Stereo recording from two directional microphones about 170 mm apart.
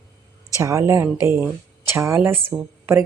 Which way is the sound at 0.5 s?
15° right (ahead or behind).